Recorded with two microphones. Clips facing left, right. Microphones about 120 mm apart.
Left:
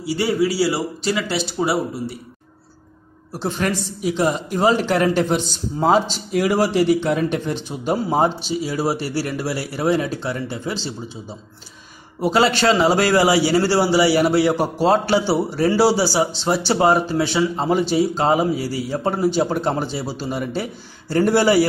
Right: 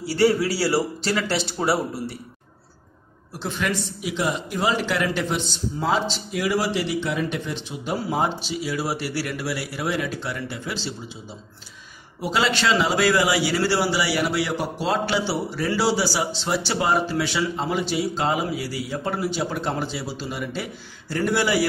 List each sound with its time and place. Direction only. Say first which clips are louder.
0.6 s speech: left 2 dB; 5° left (ahead or behind)
3.3 s a man's voice: left 4 dB; 40° left (ahead or behind)
12.2 s a man's voice: left 6 dB; 40° left (ahead or behind)